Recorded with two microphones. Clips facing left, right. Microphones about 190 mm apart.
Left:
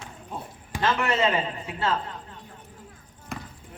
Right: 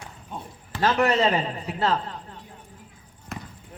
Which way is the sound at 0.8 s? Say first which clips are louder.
Right 3 dB; 40° right (ahead or behind).